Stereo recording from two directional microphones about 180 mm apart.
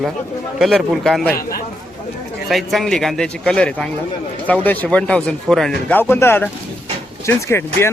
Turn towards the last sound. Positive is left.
turn(degrees=15)  # may be behind; listen again after turning